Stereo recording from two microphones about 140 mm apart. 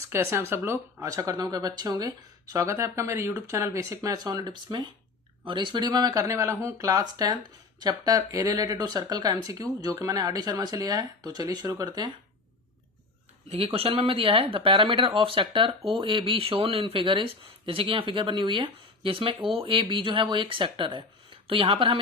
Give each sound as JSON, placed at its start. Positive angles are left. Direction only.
{"t": 0.1, "sound": "speech", "side_deg": -20}
{"t": 13.5, "sound": "speech", "side_deg": -45}